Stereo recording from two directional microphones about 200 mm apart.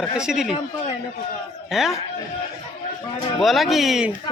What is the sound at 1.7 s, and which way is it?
Speech, centre (ahead or behind).